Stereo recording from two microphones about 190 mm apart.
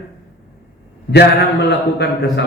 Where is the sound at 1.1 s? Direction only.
60° left (ahead or behind).